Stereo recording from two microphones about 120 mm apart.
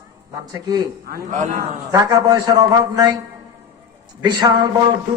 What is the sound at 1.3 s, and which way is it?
Speech, 90° right.